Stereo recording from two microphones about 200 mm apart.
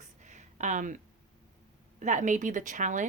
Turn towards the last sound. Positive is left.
turn(degrees=-40)  # may be behind; listen again after turning